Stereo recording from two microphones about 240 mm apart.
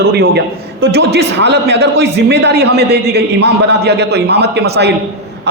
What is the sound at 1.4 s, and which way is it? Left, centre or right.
A man's voice, right.